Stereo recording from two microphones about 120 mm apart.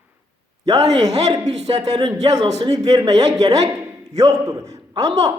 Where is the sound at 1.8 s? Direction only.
35° right (ahead or behind).